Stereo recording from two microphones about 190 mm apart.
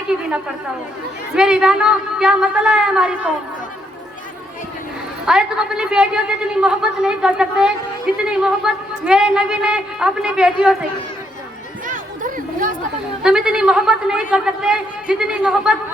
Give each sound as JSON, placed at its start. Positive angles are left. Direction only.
{"t": 1.4, "sound": "a woman's voice", "side_deg": -5}
{"t": 5.2, "sound": "a woman's voice", "side_deg": -5}
{"t": 11.9, "sound": "chatter", "side_deg": -45}
{"t": 13.2, "sound": "a woman's voice", "side_deg": -5}